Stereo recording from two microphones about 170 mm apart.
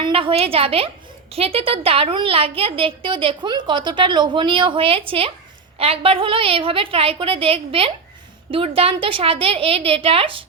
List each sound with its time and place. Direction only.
0.0 s a woman's voice: 35° right (ahead or behind)